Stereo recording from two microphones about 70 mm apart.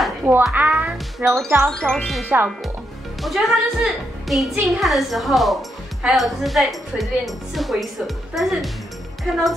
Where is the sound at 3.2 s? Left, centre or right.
Centre.